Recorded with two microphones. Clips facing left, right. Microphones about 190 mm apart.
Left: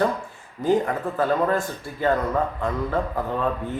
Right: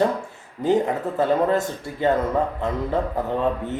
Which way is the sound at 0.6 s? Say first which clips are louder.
Right 1 dB; 20° right (ahead or behind).